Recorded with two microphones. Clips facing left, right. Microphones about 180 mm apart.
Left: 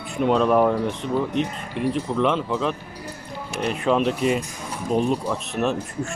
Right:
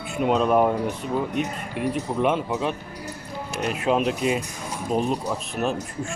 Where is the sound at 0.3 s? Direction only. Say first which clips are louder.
Left 1 dB; 5° right (ahead or behind).